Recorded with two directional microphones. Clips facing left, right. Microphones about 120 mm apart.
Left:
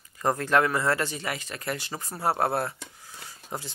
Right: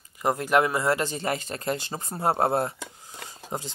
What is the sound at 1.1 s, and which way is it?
Speech, 35° right (ahead or behind).